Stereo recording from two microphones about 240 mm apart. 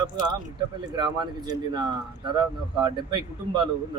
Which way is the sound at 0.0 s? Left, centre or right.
Centre.